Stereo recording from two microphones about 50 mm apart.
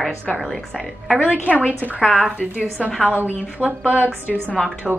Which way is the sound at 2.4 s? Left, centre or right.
Right.